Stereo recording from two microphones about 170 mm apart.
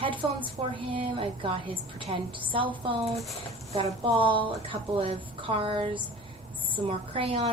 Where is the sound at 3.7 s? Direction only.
35° right (ahead or behind).